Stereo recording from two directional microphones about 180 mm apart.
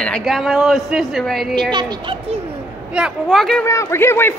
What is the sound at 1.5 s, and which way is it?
Speech, 25° right (ahead or behind).